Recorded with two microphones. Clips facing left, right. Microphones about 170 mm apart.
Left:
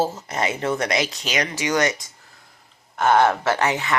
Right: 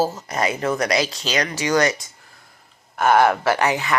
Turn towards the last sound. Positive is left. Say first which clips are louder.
# right 1 dB
turn(degrees=25)  # may be behind; listen again after turning